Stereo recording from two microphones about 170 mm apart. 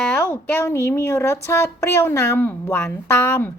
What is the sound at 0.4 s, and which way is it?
Speech, 15° left (ahead or behind).